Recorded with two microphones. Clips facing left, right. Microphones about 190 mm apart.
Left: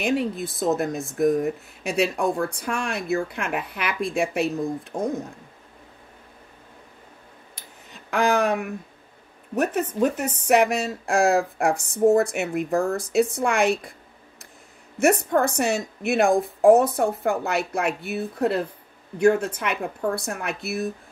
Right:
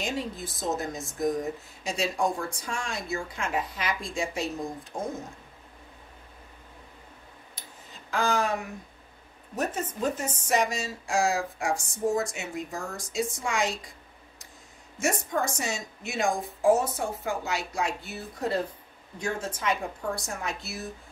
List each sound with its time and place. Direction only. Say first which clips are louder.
0.0 s speech: left 8 dB; 60° left (ahead or behind)
8.1 s speech: left 6 dB; 65° left (ahead or behind)
15.0 s speech: left 9 dB; 60° left (ahead or behind)